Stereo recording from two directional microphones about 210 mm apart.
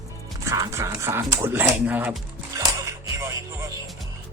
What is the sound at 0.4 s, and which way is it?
Speech, 15° right (ahead or behind).